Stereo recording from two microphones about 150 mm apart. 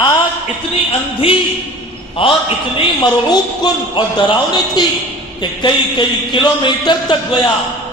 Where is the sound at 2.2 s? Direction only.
35° left (ahead or behind).